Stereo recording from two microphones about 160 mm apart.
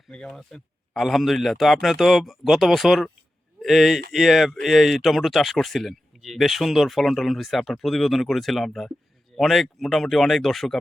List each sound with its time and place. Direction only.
0.1 s speech: centre (ahead or behind)